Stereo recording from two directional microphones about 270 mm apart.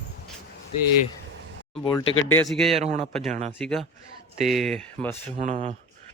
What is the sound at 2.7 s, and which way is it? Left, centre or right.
Speech, right.